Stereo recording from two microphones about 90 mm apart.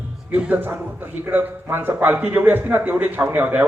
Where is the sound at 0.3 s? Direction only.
15° right (ahead or behind).